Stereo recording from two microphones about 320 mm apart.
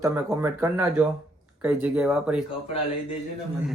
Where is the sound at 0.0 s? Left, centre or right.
Centre.